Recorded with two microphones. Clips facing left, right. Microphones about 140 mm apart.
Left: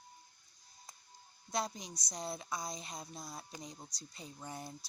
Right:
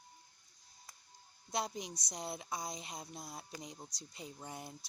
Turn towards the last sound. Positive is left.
turn(degrees=-15)  # may be behind; listen again after turning